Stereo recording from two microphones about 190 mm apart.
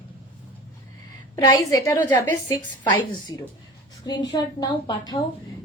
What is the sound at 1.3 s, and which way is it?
A woman's voice, 15° left (ahead or behind).